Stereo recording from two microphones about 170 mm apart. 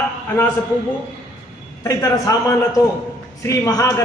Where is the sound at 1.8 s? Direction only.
20° left (ahead or behind).